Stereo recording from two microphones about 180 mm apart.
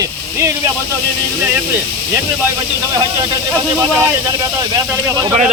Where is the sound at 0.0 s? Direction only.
15° right (ahead or behind).